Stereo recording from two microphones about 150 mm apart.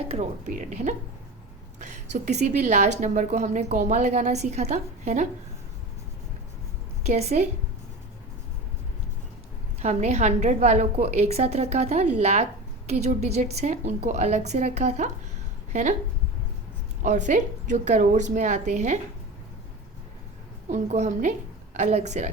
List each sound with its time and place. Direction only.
0.1 s a woman's voice: 50° right (ahead or behind)
7.0 s a woman's voice: 45° right (ahead or behind)
9.8 s a woman's voice: 45° right (ahead or behind)
17.0 s a woman's voice: 55° right (ahead or behind)
20.7 s a woman's voice: 50° right (ahead or behind)